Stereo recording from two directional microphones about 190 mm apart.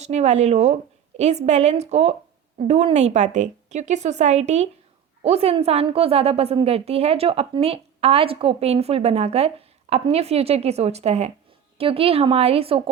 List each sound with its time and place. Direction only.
0.0 s a woman's voice: 35° right (ahead or behind)